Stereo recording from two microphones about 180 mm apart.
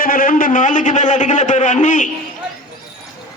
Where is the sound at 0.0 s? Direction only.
50° left (ahead or behind).